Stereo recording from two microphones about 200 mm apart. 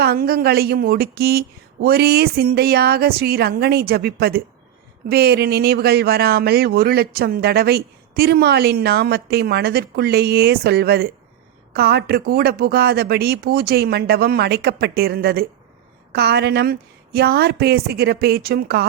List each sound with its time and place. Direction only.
0.0 s speech: 50° right (ahead or behind)